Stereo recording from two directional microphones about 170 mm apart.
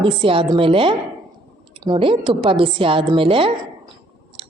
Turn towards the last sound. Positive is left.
turn(degrees=-30)  # may be behind; listen again after turning